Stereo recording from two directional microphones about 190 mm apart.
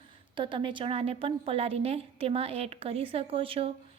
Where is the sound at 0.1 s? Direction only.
25° right (ahead or behind).